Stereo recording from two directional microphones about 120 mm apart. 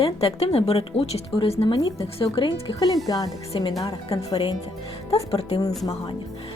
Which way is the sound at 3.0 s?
30° left (ahead or behind).